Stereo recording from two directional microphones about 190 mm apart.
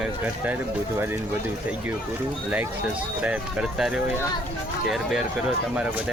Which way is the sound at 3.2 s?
5° right (ahead or behind).